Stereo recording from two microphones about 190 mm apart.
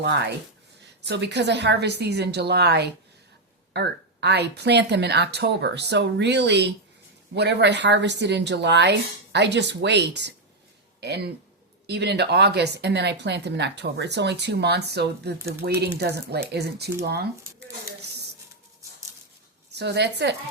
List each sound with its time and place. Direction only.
0.0 s speech: 60° right (ahead or behind)
19.7 s speech: 60° right (ahead or behind)